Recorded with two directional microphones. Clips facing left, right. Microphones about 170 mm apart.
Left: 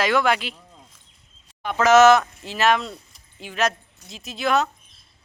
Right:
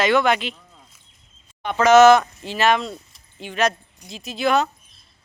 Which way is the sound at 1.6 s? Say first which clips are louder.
Right 2 dB; centre (ahead or behind).